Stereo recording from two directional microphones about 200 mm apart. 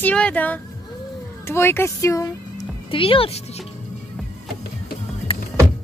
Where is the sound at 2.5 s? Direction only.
25° left (ahead or behind).